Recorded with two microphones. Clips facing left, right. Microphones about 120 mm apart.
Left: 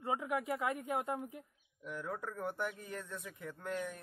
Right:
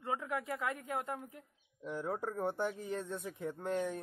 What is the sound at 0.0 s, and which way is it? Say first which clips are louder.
Speech: left 1 dB; 15° left (ahead or behind).